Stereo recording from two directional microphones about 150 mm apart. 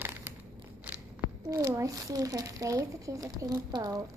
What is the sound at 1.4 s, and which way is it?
Speech, 20° right (ahead or behind).